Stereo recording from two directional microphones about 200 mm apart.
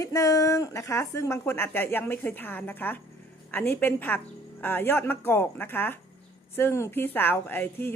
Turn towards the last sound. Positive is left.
turn(degrees=10)  # may be behind; listen again after turning